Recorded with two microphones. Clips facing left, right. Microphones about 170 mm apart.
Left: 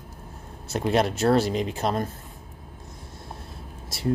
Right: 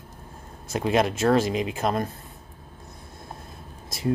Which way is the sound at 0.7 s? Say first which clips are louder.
Even; 15° right (ahead or behind).